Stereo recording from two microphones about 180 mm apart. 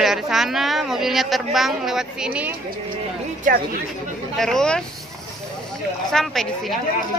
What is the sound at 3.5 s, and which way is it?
Speech, 45° right (ahead or behind).